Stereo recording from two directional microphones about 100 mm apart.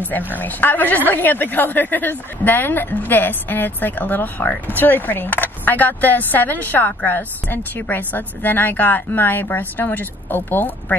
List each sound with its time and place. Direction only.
0.3 s a woman's voice: 20° left (ahead or behind)